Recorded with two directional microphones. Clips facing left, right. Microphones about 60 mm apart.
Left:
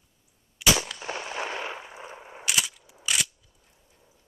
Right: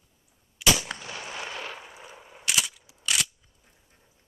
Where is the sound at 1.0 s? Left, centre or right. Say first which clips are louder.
Left 4 dB; left.